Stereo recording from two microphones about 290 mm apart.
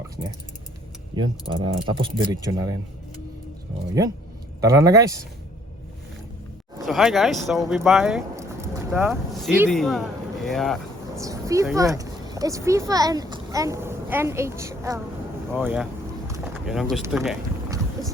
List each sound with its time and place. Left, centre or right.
1.1 s speech: centre
4.6 s speech: centre
6.8 s speech: centre
11.2 s speech: centre